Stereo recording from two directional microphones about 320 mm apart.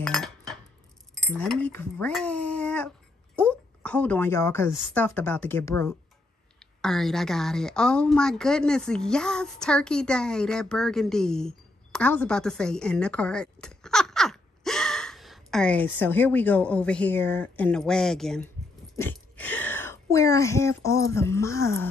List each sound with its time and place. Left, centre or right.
0.0 s cutlery: centre
1.1 s a woman's voice: centre